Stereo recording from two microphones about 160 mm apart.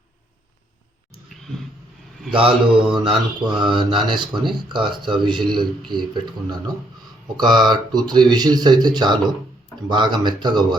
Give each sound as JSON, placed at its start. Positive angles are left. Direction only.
{"t": 2.3, "sound": "mantra", "side_deg": -35}
{"t": 2.9, "sound": "speech", "side_deg": -30}